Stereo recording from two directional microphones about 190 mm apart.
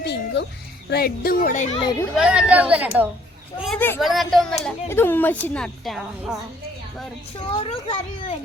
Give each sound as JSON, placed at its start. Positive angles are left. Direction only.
{"t": 0.0, "sound": "music", "side_deg": 60}
{"t": 0.9, "sound": "speech", "side_deg": 55}
{"t": 1.8, "sound": "a child's voice", "side_deg": 20}
{"t": 2.1, "sound": "a woman's voice", "side_deg": -5}
{"t": 3.8, "sound": "speech", "side_deg": 10}
{"t": 4.0, "sound": "a woman's voice", "side_deg": 0}
{"t": 7.6, "sound": "a child's voice", "side_deg": 25}